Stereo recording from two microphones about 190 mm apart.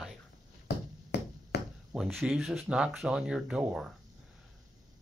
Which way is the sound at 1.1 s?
60° left (ahead or behind).